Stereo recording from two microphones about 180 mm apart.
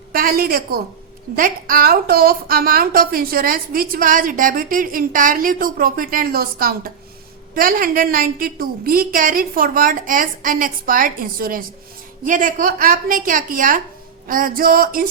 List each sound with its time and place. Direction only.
0.1 s a woman's voice: 55° right (ahead or behind)